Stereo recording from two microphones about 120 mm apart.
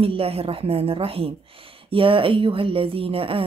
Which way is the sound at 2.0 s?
45° right (ahead or behind).